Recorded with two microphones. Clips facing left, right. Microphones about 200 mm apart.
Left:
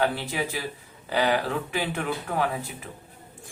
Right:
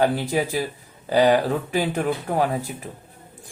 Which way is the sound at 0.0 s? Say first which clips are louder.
Right 6 dB; 40° right (ahead or behind).